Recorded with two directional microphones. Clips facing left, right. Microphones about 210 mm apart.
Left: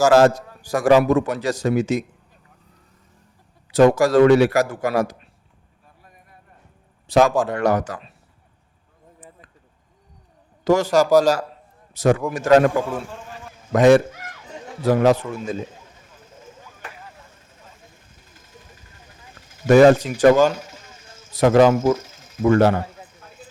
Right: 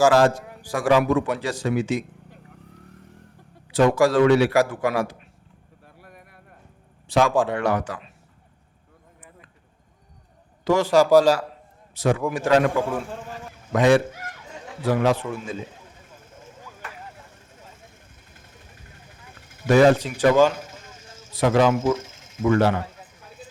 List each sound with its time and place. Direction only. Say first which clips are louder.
0.0 s a man's voice: left 3 dB; 40° left (ahead or behind)
2.3 s vehicle: right 8 dB; 65° right (ahead or behind)
3.7 s a man's voice: left 3 dB; 40° left (ahead or behind)
5.8 s a sound: right 5 dB; 70° right (ahead or behind)
7.1 s a man's voice: left 3 dB; 40° left (ahead or behind)
10.6 s a man's voice: left 1 dB; 45° left (ahead or behind)
13.7 s a man's voice: left 4 dB; 45° left (ahead or behind)
19.6 s a man's voice: left 4 dB; 45° left (ahead or behind)
21.9 s a sound: right 2 dB; 25° right (ahead or behind)
22.4 s a man's voice: left 4 dB; 45° left (ahead or behind)